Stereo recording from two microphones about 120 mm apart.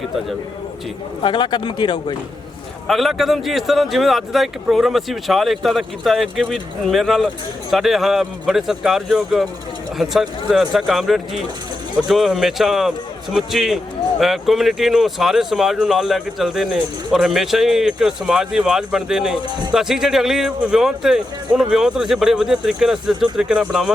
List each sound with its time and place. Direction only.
1.2 s speech: 40° left (ahead or behind)
2.8 s speech: centre (ahead or behind)